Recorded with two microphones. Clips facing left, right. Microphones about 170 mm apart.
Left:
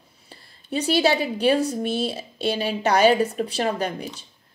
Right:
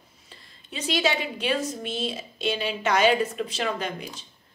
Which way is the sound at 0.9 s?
35° left (ahead or behind).